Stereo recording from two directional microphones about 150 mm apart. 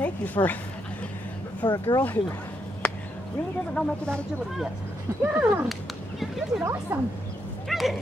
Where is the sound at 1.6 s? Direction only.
25° left (ahead or behind).